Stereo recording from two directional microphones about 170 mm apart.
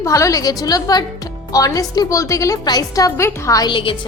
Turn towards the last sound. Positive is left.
turn(degrees=30)  # may be behind; listen again after turning